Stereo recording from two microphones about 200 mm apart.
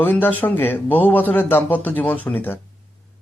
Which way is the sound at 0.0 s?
10° left (ahead or behind).